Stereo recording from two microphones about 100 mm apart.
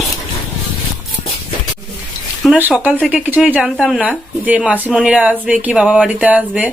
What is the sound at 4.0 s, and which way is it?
Speech, 15° right (ahead or behind).